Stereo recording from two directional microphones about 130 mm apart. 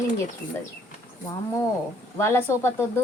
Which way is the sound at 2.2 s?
20° left (ahead or behind).